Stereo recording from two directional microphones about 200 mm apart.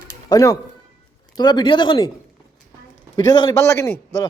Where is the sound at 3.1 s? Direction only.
20° left (ahead or behind).